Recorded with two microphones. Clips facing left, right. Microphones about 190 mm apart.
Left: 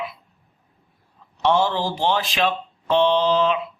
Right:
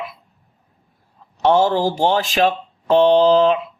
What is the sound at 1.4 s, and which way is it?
A man's voice, 40° right (ahead or behind).